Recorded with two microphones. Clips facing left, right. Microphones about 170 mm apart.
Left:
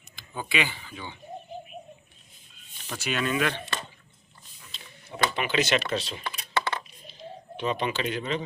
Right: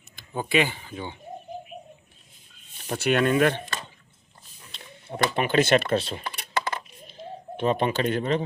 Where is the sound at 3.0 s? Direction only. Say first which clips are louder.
Right 7 dB; 55° right (ahead or behind).